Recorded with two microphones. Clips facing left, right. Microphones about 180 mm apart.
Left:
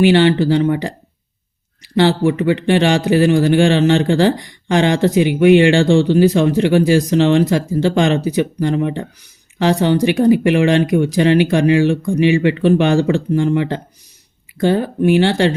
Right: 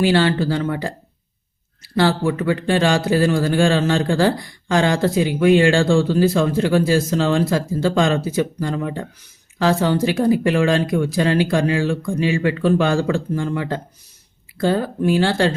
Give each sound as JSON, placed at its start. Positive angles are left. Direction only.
{"t": 0.0, "sound": "speech", "side_deg": 20}